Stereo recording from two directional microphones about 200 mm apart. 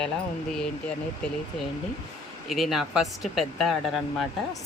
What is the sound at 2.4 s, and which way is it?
Speech, centre (ahead or behind).